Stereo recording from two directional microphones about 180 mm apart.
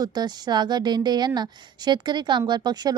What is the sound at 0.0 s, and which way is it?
Speech, 20° right (ahead or behind).